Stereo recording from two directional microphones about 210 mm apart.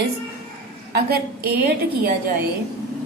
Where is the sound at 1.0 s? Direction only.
50° right (ahead or behind).